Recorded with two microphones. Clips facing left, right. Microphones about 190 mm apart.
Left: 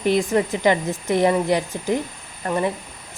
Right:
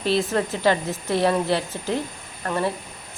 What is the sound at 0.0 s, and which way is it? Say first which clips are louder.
Speech: left 3 dB; 15° left (ahead or behind).